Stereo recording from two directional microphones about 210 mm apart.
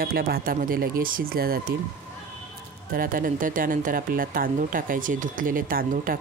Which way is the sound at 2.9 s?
40° right (ahead or behind).